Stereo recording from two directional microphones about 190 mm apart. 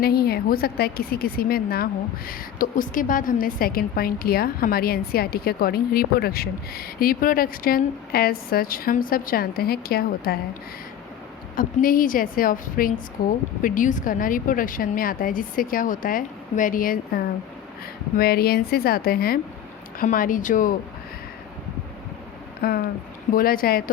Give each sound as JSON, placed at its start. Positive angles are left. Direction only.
{"t": 0.0, "sound": "a woman's voice", "side_deg": 55}
{"t": 11.5, "sound": "a woman's voice", "side_deg": 50}
{"t": 22.6, "sound": "a woman's voice", "side_deg": 55}